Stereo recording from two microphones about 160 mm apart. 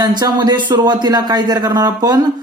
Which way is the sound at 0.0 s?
25° right (ahead or behind).